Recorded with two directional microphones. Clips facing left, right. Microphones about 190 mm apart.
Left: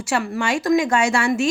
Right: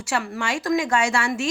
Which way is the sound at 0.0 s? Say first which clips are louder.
Left 4 dB; 15° left (ahead or behind).